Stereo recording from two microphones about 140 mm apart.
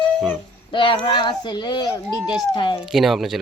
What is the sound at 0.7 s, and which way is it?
Speech, 35° left (ahead or behind).